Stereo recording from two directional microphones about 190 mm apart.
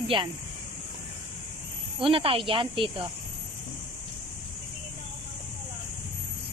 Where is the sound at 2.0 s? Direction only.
30° right (ahead or behind).